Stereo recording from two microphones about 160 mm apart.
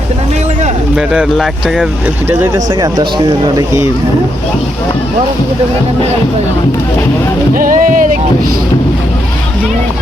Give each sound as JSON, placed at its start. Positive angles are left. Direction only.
{"t": 0.9, "sound": "speech", "side_deg": -5}
{"t": 2.6, "sound": "speech", "side_deg": -25}
{"t": 7.5, "sound": "music", "side_deg": -55}